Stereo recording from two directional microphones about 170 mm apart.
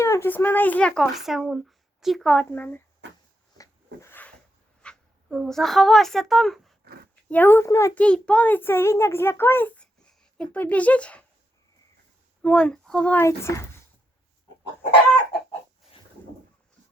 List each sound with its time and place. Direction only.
0.0 s speech: 15° left (ahead or behind)
3.6 s a sound: 15° left (ahead or behind)
4.8 s a child's voice: 5° left (ahead or behind)
6.8 s a sound: 65° right (ahead or behind)
7.3 s speech: 10° left (ahead or behind)
12.4 s speech: 5° left (ahead or behind)